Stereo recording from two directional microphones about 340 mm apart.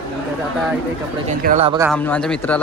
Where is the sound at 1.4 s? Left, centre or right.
Right.